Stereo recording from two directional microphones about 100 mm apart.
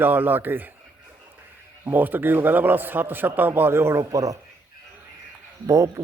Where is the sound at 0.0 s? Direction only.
20° right (ahead or behind).